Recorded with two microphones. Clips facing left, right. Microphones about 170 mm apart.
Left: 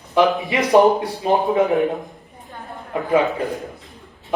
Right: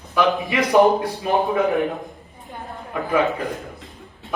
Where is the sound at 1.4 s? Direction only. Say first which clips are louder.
Left 3 dB; 20° left (ahead or behind).